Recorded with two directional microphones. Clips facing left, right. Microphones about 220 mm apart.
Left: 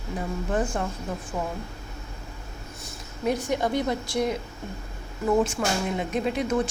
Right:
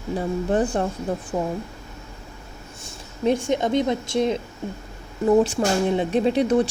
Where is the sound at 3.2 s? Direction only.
25° right (ahead or behind).